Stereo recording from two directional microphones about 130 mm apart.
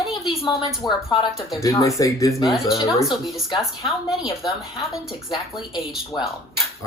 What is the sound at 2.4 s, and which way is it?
Speech, centre (ahead or behind).